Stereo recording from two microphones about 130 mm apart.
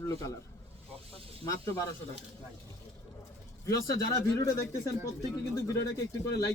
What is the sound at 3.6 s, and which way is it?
Speech, 25° left (ahead or behind).